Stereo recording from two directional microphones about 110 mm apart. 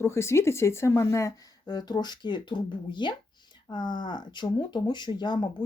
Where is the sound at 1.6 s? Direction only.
40° left (ahead or behind).